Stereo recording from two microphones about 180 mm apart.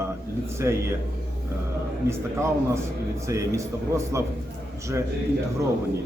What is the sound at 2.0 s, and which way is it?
A man's voice, 15° right (ahead or behind).